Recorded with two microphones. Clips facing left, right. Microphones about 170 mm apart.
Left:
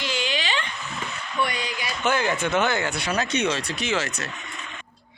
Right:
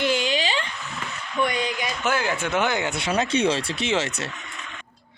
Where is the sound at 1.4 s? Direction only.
50° right (ahead or behind).